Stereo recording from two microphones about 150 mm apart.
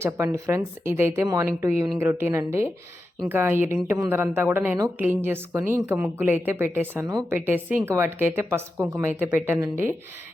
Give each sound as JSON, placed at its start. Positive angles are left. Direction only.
{"t": 0.0, "sound": "a woman's voice", "side_deg": -20}
{"t": 7.1, "sound": "a woman's voice", "side_deg": -25}
{"t": 7.3, "sound": "a woman's voice", "side_deg": -15}